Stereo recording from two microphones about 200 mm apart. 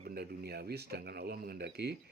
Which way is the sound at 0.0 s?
50° right (ahead or behind).